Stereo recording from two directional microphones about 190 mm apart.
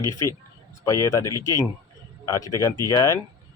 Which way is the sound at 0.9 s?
15° left (ahead or behind).